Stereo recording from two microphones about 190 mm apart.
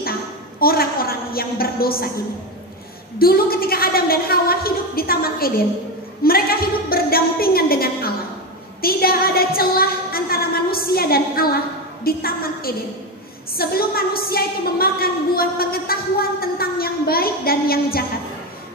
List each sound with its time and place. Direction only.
0.6 s a woman's voice: 50° left (ahead or behind)
3.2 s a woman's voice: 50° left (ahead or behind)
6.2 s a sound: 50° left (ahead or behind)
8.8 s music: 50° left (ahead or behind)
12.0 s a woman's voice: 50° left (ahead or behind)